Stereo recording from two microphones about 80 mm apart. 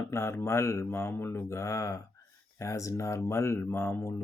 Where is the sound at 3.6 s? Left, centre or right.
Left.